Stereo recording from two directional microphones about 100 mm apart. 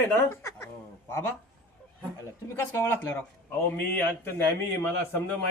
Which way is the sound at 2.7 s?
25° left (ahead or behind).